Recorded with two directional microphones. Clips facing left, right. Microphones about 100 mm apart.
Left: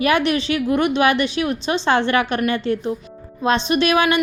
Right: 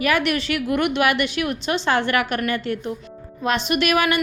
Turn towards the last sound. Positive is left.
turn(degrees=25)  # may be behind; listen again after turning